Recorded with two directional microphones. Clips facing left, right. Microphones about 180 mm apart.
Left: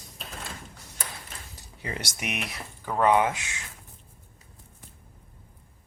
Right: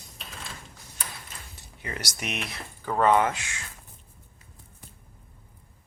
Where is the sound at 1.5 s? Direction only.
30° left (ahead or behind).